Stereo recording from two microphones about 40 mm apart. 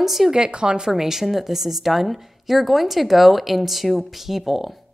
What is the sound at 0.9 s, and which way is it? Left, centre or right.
Speech, centre.